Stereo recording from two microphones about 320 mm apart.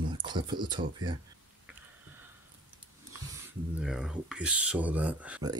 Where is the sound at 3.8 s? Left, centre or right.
Centre.